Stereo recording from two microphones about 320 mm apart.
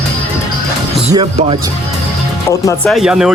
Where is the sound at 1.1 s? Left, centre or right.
Centre.